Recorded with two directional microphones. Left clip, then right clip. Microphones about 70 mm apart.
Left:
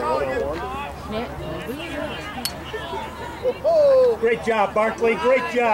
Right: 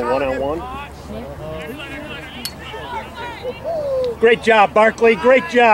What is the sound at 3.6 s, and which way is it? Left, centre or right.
Speech, centre.